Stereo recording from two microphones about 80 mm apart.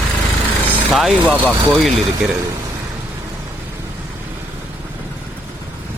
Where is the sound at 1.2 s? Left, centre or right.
Centre.